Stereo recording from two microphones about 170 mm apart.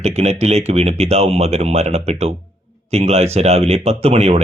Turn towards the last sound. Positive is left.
turn(degrees=-40)  # may be behind; listen again after turning